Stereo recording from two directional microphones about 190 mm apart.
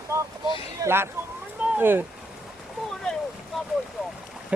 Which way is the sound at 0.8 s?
15° right (ahead or behind).